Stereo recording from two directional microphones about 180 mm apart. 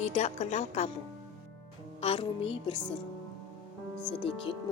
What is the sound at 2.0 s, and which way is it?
Speech, 30° left (ahead or behind).